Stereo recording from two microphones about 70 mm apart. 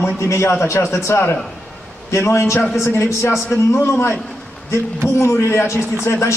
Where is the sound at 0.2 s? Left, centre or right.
Left.